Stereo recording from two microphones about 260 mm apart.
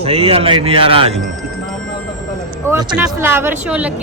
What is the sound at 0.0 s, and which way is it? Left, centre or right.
A man's voice, right.